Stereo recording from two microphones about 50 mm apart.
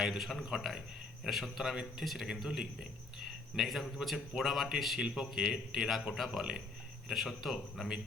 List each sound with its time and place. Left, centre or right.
0.0 s a man's voice: centre